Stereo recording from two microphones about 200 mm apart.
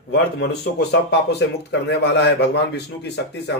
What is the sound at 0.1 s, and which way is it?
A man's voice, 55° left (ahead or behind).